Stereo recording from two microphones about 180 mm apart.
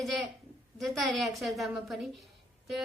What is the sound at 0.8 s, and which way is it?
Speech, centre (ahead or behind).